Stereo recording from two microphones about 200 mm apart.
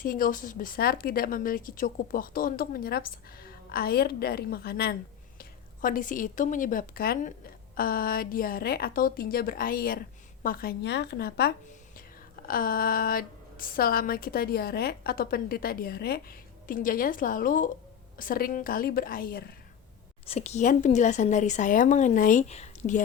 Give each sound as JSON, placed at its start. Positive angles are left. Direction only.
{"t": 0.0, "sound": "a woman's voice", "side_deg": 45}
{"t": 20.2, "sound": "speech", "side_deg": 30}